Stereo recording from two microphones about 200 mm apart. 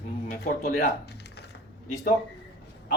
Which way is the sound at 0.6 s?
50° left (ahead or behind).